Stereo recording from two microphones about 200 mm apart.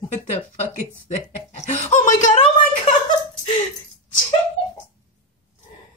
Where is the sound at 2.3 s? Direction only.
25° left (ahead or behind).